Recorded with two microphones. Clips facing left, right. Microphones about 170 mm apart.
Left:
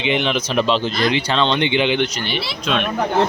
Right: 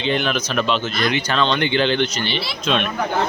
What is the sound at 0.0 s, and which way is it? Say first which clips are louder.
Speech: left 1 dB; 20° left (ahead or behind).